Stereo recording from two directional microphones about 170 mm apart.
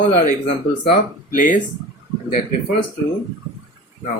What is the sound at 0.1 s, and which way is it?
Speech, 45° left (ahead or behind).